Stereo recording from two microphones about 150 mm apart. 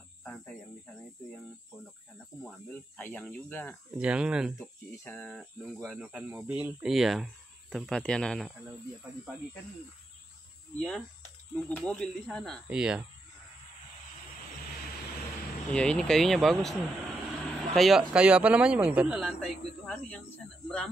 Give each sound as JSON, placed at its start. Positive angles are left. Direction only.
{"t": 0.2, "sound": "cricket", "side_deg": 10}
{"t": 2.4, "sound": "speech", "side_deg": 5}
{"t": 3.9, "sound": "speech", "side_deg": -10}
{"t": 4.6, "sound": "speech", "side_deg": 20}
{"t": 5.1, "sound": "a man's voice", "side_deg": 5}
{"t": 10.8, "sound": "a man's voice", "side_deg": 5}
{"t": 15.7, "sound": "a man's voice", "side_deg": 5}